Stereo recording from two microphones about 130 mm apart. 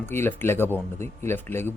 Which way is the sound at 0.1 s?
15° left (ahead or behind).